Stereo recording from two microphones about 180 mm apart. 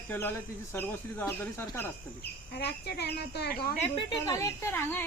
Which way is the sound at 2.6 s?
65° left (ahead or behind).